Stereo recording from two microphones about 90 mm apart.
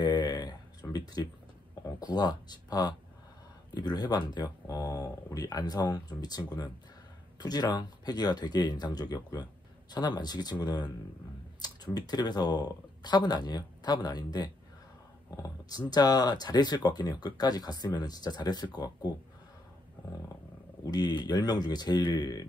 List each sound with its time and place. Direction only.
0.0 s a sound: 55° left (ahead or behind)
2.0 s speech: 50° left (ahead or behind)
20.8 s speech: 50° left (ahead or behind)